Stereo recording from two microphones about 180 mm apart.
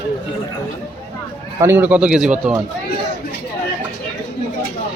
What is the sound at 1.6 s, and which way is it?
Speech, 15° right (ahead or behind).